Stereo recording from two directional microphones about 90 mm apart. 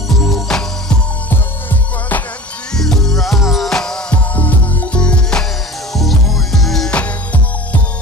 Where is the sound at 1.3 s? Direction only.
20° left (ahead or behind).